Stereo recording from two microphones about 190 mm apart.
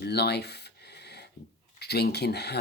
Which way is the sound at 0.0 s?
60° left (ahead or behind).